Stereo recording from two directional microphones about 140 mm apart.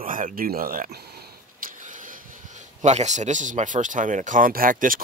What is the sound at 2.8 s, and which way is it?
Speech, 55° right (ahead or behind).